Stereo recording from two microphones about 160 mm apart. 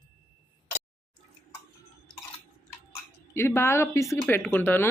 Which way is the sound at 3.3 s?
15° left (ahead or behind).